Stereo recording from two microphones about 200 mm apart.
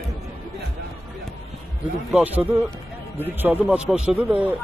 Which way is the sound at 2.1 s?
10° right (ahead or behind).